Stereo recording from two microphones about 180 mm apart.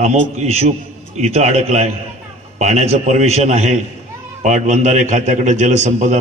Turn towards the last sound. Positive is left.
turn(degrees=-40)  # may be behind; listen again after turning